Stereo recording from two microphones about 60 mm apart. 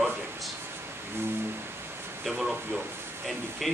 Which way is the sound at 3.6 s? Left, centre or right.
Centre.